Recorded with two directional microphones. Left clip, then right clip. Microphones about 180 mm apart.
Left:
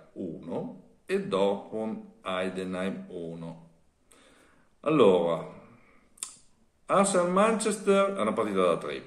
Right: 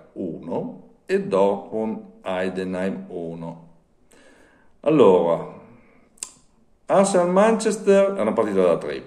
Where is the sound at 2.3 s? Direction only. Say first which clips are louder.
Right 6 dB; 40° right (ahead or behind).